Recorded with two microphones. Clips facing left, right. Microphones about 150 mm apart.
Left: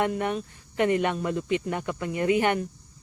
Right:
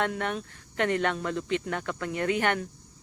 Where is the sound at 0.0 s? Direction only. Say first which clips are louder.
Left 3 dB; 10° left (ahead or behind).